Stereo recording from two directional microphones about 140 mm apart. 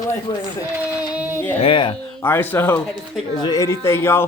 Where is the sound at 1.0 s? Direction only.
10° right (ahead or behind).